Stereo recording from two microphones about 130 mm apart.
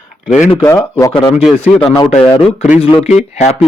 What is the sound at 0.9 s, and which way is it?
Speech, 30° left (ahead or behind).